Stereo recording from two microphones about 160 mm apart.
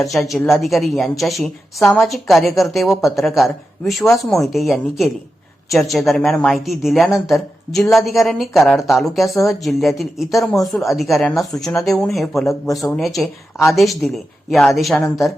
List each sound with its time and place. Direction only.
0.0 s speech: centre (ahead or behind)